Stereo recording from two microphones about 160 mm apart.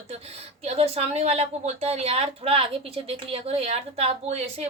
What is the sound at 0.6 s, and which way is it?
A woman's voice, 40° right (ahead or behind).